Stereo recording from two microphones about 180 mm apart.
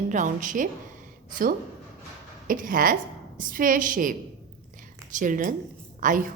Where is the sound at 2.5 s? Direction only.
50° right (ahead or behind).